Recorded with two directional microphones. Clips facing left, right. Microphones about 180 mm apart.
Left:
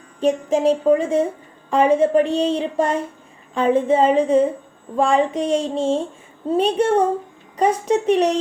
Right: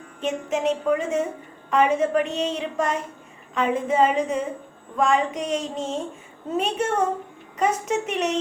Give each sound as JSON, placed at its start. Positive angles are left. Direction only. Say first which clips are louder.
{"t": 0.2, "sound": "a woman's voice", "louder": "left 7 dB", "side_deg": 35}
{"t": 4.9, "sound": "female singing", "louder": "left 4 dB", "side_deg": 30}
{"t": 6.5, "sound": "a woman's voice", "louder": "left 7 dB", "side_deg": 30}